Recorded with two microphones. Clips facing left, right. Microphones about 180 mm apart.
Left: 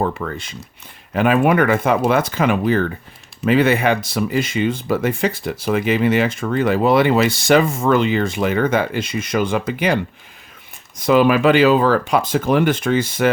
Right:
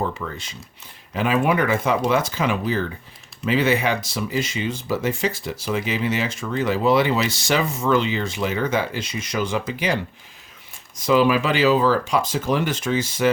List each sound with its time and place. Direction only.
0.0 s speech: 55° left (ahead or behind)